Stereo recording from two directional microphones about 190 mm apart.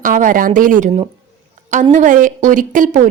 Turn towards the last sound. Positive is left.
turn(degrees=-40)  # may be behind; listen again after turning